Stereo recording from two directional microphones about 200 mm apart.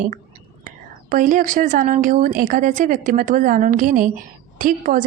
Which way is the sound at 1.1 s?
40° right (ahead or behind).